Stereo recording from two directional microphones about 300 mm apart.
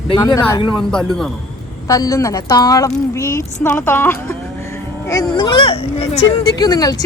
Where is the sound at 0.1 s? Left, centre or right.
Centre.